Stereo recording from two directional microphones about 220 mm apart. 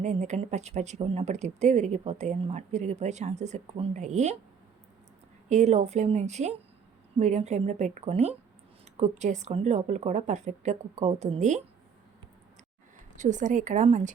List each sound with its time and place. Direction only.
0.0 s speech: 30° right (ahead or behind)
5.5 s speech: 30° right (ahead or behind)
13.1 s speech: 35° right (ahead or behind)